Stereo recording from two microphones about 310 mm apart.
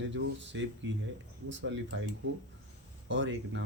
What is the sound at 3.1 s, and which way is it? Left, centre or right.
Speech, right.